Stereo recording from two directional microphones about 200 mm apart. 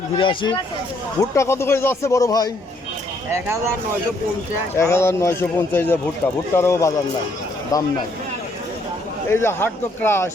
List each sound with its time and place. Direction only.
0.2 s speech: 25° left (ahead or behind)
1.4 s speech: 15° left (ahead or behind)
3.3 s speech: 15° right (ahead or behind)
4.8 s speech: 15° left (ahead or behind)
9.3 s speech: 10° left (ahead or behind)